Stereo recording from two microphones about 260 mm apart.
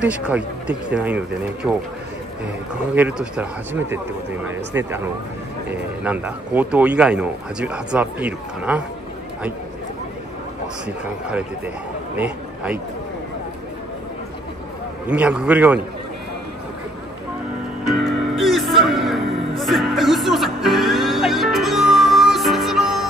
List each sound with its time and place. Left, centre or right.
0.0 s speech: centre
2.9 s speech: centre
4.7 s speech: centre
15.0 s speech: centre
17.8 s music: centre